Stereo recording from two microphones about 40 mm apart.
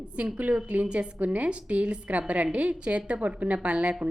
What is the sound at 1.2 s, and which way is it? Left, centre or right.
A woman's voice, right.